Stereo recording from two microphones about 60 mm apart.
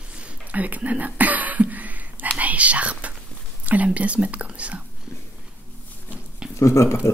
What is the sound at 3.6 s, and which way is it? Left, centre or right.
Speech, right.